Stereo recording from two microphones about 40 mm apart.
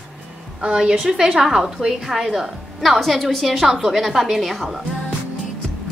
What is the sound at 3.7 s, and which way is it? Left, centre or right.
A woman's voice, centre.